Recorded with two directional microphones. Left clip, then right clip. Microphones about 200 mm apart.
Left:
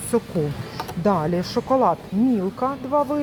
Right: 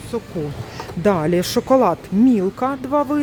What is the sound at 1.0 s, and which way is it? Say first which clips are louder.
Speech: right 4 dB; 45° right (ahead or behind).